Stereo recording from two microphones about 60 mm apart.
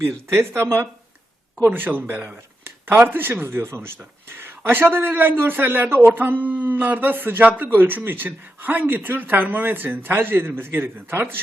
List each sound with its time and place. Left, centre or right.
0.0 s speech: right
1.6 s a man's voice: right